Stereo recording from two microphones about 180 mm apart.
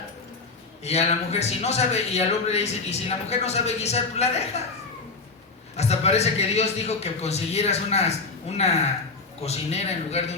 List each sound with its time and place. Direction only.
0.9 s speech: 35° left (ahead or behind)
5.7 s speech: 35° left (ahead or behind)